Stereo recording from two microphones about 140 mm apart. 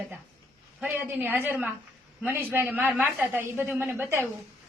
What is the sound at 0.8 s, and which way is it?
A woman's voice, 15° right (ahead or behind).